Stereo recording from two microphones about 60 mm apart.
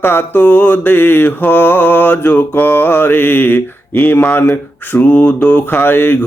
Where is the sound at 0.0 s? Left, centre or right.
Left.